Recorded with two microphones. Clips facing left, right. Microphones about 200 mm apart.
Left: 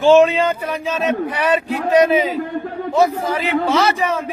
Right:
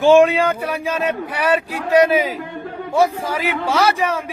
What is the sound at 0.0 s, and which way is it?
Speech, 15° right (ahead or behind).